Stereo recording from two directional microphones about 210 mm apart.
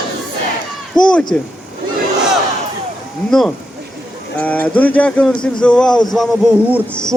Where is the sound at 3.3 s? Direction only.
Centre (ahead or behind).